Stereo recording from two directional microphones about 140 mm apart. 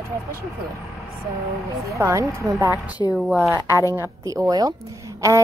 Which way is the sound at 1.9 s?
20° right (ahead or behind).